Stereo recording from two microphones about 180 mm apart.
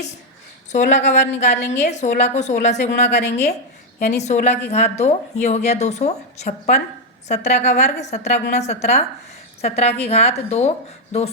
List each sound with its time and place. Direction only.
0.9 s a woman's voice: 40° left (ahead or behind)